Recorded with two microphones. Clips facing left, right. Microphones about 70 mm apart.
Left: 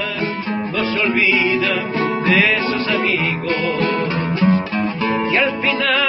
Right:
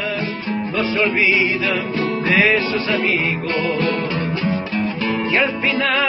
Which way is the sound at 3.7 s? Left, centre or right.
Left.